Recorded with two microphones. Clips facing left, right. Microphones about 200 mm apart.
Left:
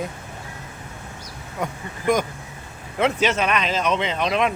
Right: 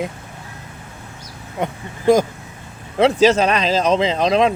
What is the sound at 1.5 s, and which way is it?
Speech, 30° right (ahead or behind).